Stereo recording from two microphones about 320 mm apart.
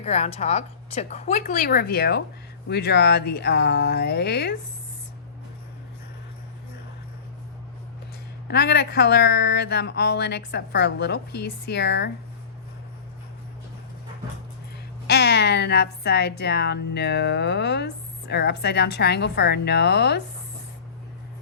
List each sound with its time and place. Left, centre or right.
0.0 s a woman's voice: centre
8.4 s a woman's voice: left
15.0 s a woman's voice: left